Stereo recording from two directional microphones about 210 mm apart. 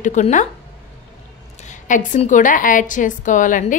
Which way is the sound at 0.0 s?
35° left (ahead or behind).